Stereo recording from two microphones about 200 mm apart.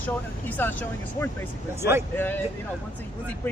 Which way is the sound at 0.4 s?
10° left (ahead or behind).